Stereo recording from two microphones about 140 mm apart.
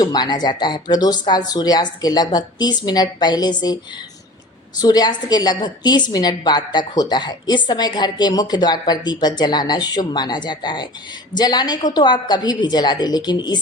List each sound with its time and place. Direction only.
0.0 s speech: 30° left (ahead or behind)
4.8 s a woman's voice: 30° left (ahead or behind)